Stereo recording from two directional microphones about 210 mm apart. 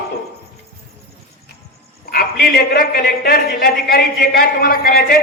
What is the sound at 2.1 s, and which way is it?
A man's voice, 45° left (ahead or behind).